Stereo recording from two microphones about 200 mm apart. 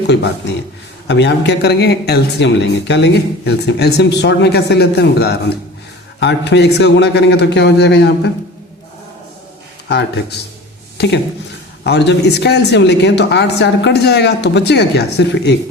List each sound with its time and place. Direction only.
1.0 s speech: 60° left (ahead or behind)
9.9 s speech: 55° left (ahead or behind)